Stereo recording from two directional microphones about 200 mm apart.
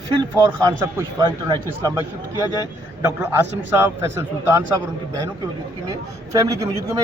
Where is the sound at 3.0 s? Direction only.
10° right (ahead or behind).